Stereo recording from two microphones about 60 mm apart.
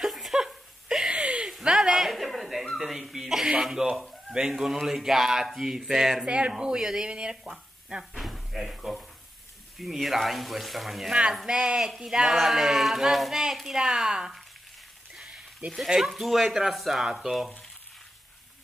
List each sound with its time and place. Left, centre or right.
0.0 s laughter: centre
1.6 s a sound: centre
2.7 s a man's voice: centre
8.2 s door: centre
9.8 s speech: centre
11.3 s speech: centre
15.1 s a sound: centre
15.7 s speech: centre